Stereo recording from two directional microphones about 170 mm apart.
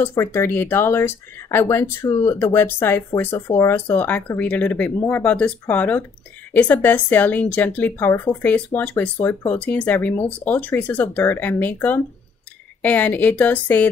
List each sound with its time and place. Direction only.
0.0 s speech: 15° left (ahead or behind)